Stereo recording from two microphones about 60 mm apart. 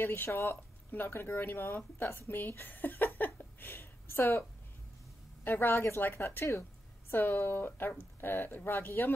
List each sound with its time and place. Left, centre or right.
0.0 s speech: left
5.4 s a woman's voice: left
7.1 s a woman's voice: left